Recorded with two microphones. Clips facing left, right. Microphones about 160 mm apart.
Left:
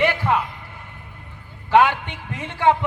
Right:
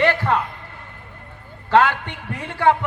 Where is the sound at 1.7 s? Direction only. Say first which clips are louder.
Even; 15° left (ahead or behind).